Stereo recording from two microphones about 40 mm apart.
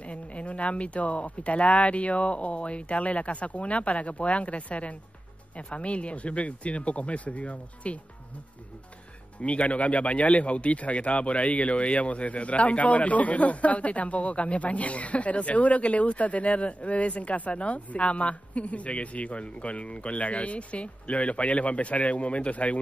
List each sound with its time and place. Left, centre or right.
0.0 s speech: left
9.4 s speech: left